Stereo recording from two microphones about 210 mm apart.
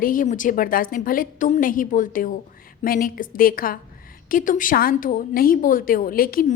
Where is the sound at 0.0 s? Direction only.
40° left (ahead or behind).